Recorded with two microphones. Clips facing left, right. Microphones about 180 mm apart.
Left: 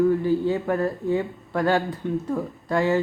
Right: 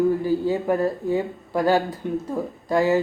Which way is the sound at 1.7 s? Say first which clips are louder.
Right 2 dB; 40° right (ahead or behind).